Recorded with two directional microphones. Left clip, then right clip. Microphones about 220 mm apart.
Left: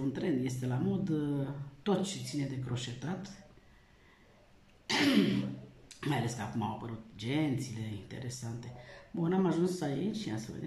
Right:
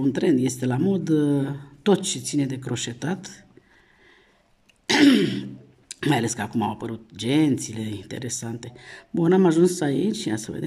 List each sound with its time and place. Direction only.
0.0 s speech: 45° right (ahead or behind)
4.8 s throat clearing: 50° right (ahead or behind)
5.9 s speech: 45° right (ahead or behind)